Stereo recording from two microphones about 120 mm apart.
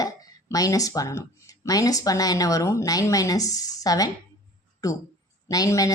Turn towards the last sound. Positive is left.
turn(degrees=30)  # may be behind; listen again after turning